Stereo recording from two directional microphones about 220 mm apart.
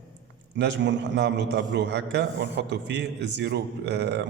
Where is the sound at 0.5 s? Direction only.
55° right (ahead or behind).